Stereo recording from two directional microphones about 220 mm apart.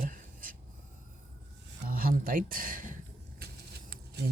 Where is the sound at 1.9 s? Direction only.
40° right (ahead or behind).